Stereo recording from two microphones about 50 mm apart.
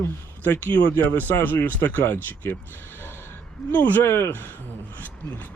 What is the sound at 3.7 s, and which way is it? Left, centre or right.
Speech, left.